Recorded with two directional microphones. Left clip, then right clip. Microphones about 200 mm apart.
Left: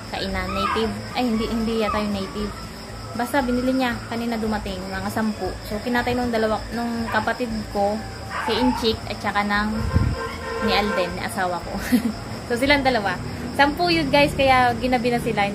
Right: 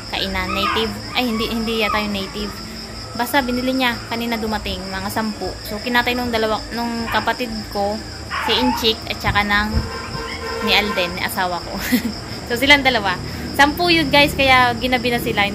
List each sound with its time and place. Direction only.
0.1 s a woman's voice: 5° left (ahead or behind)
8.5 s a woman's voice: 5° left (ahead or behind)
10.7 s a woman's voice: 5° left (ahead or behind)